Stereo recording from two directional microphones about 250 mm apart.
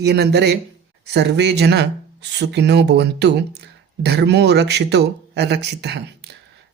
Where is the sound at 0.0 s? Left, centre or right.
Right.